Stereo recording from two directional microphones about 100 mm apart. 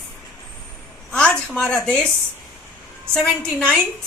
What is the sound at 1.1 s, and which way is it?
Speech, 5° left (ahead or behind).